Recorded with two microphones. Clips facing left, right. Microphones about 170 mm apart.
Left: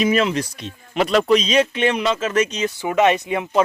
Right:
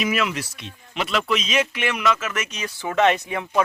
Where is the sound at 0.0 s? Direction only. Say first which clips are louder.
Left 6 dB; 30° left (ahead or behind).